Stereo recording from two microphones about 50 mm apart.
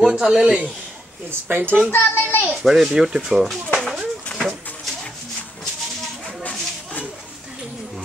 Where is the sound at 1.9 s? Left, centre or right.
Left.